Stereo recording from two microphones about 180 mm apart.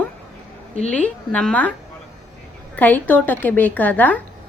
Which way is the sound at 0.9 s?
5° left (ahead or behind).